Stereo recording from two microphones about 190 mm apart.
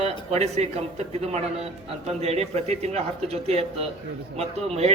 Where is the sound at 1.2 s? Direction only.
35° right (ahead or behind).